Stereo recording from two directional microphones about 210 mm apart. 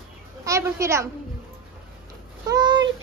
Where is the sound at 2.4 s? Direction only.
20° right (ahead or behind).